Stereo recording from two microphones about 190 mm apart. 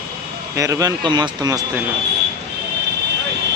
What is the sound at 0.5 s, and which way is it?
Speech, 15° right (ahead or behind).